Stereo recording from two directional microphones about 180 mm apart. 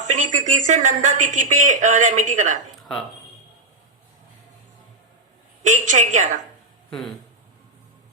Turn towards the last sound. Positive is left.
turn(degrees=-40)  # may be behind; listen again after turning